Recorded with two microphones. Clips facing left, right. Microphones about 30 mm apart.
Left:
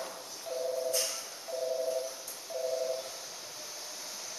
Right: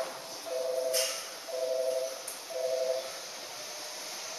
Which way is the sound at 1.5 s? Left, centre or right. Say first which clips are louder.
Right 1 dB; centre.